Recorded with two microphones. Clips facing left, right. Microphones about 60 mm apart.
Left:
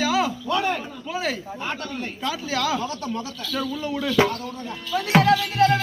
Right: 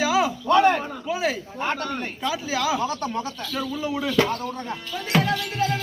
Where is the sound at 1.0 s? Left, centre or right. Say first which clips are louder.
Right 1 dB; centre.